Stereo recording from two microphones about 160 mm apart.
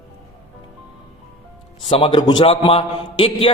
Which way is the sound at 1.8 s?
35° left (ahead or behind).